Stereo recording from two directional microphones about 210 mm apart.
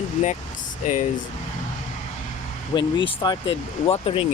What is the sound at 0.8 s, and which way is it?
Speech, 35° left (ahead or behind).